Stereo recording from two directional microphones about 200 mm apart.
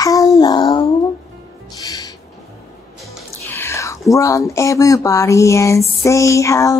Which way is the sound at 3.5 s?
10° left (ahead or behind).